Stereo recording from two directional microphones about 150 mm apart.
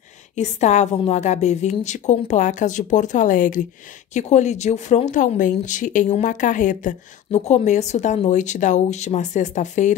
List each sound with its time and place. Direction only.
0.4 s speech: 50° left (ahead or behind)
4.1 s speech: 50° left (ahead or behind)